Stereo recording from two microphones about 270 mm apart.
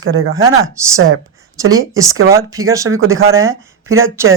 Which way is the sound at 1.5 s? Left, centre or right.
Centre.